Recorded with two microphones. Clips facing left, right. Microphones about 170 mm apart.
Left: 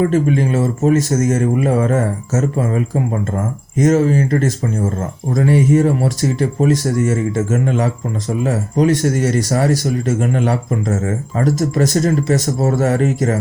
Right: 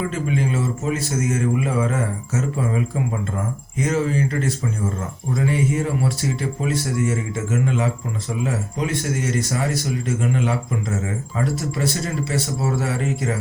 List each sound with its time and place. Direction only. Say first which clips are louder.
0.0 s speech: left 8 dB; 45° left (ahead or behind)